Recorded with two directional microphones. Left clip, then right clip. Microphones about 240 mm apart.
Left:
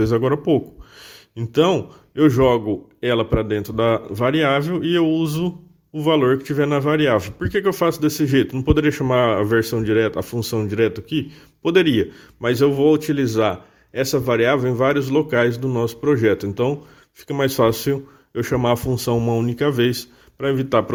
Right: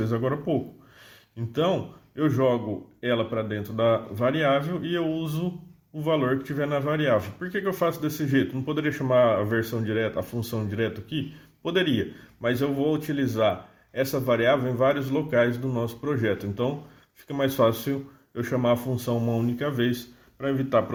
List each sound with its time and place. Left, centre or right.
0.0 s speech: left